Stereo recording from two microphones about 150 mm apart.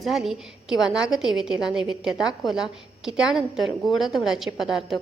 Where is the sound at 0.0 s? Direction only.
Centre (ahead or behind).